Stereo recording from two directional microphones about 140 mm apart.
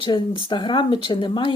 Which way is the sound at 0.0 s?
35° left (ahead or behind).